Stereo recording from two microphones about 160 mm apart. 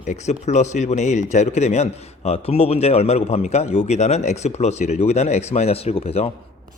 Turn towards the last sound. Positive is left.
turn(degrees=40)  # may be behind; listen again after turning